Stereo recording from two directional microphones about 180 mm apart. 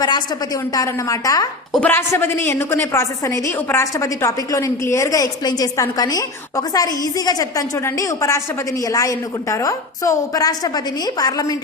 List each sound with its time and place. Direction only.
0.7 s a woman's voice: 20° left (ahead or behind)